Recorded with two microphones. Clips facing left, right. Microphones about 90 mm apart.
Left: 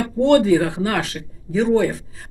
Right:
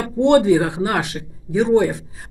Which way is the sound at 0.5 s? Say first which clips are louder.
Right 1 dB; 20° right (ahead or behind).